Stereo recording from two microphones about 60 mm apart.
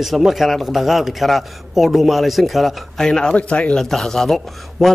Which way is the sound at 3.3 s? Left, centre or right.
Left.